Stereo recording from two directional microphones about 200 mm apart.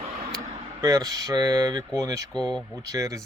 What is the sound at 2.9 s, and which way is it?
Speech, 15° right (ahead or behind).